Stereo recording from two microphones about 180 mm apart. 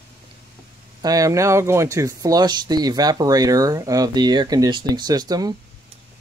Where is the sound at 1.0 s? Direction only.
20° right (ahead or behind).